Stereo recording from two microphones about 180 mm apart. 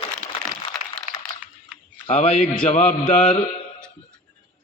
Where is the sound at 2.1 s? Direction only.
35° left (ahead or behind).